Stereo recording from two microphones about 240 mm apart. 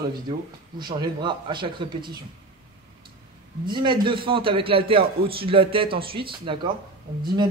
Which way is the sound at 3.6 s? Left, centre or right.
Centre.